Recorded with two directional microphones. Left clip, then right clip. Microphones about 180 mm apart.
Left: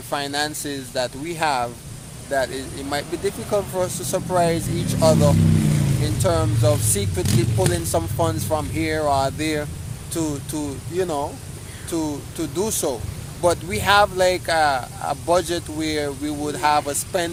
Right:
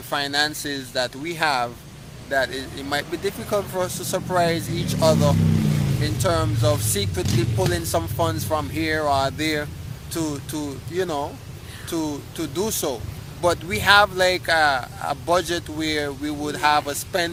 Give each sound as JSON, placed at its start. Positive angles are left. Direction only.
{"t": 0.1, "sound": "speech", "side_deg": 0}
{"t": 5.6, "sound": "vehicle", "side_deg": -60}
{"t": 6.0, "sound": "speech", "side_deg": 0}